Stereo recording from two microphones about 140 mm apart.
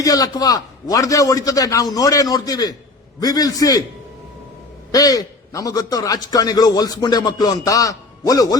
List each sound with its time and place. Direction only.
0.0 s a man's voice: 25° left (ahead or behind)
4.9 s a man's voice: 25° left (ahead or behind)